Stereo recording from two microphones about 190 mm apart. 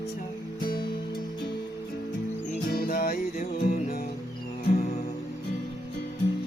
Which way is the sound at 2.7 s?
50° left (ahead or behind).